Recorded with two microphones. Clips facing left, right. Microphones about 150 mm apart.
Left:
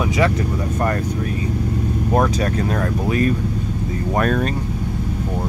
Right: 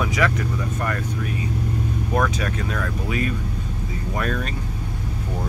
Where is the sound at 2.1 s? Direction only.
35° left (ahead or behind).